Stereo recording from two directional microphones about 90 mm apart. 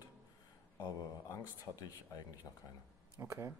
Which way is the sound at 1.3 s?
40° left (ahead or behind).